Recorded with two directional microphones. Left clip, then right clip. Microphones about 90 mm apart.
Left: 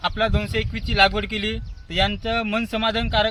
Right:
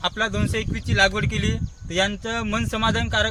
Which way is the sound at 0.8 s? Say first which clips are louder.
Left 2 dB; 45° right (ahead or behind).